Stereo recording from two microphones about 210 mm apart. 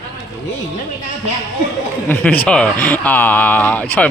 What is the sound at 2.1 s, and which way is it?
Speech, 5° left (ahead or behind).